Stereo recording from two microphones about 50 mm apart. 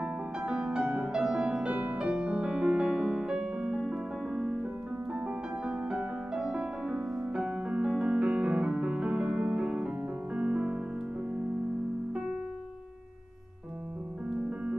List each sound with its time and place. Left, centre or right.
0.0 s music: centre
0.8 s music: right
1.1 s music: centre
7.4 s music: right
12.1 s keyboard: right